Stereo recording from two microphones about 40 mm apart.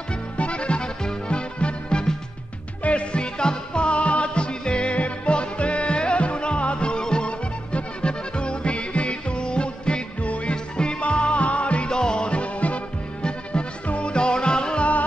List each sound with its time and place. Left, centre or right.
0.4 s music: left
11.9 s music: left